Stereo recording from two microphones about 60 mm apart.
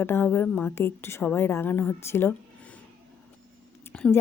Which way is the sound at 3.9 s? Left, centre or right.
Centre.